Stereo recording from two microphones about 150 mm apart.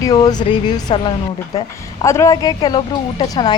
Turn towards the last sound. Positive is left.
turn(degrees=30)  # may be behind; listen again after turning